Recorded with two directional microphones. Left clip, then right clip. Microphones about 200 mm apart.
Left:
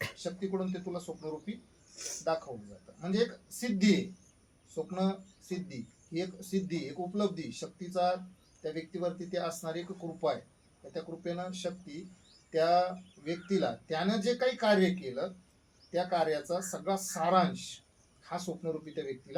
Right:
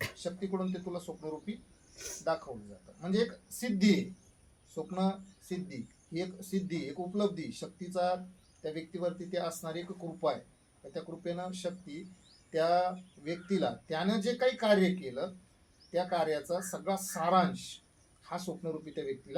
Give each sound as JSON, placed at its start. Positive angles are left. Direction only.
{"t": 0.2, "sound": "speech", "side_deg": -10}
{"t": 2.0, "sound": "a sound", "side_deg": -20}
{"t": 3.0, "sound": "speech", "side_deg": -10}